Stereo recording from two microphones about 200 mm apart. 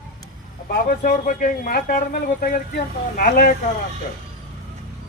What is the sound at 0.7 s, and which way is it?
A man's voice, 45° left (ahead or behind).